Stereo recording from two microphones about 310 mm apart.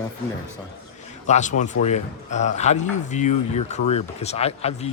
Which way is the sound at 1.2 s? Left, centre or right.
Left.